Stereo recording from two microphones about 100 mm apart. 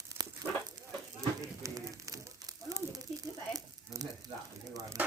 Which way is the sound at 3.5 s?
40° right (ahead or behind).